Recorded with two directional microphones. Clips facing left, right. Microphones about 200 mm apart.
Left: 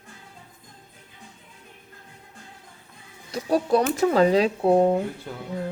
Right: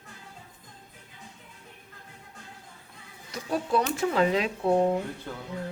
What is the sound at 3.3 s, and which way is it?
Speech, 40° left (ahead or behind).